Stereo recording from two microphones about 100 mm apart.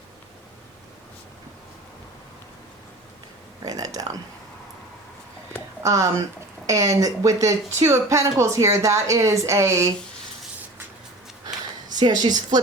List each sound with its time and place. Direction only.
3.6 s speech: 40° right (ahead or behind)
5.8 s speech: 35° right (ahead or behind)
11.9 s a woman's voice: 45° right (ahead or behind)